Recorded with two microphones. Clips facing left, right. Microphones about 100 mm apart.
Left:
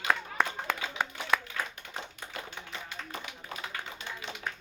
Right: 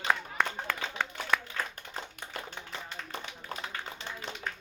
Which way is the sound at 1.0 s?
15° left (ahead or behind).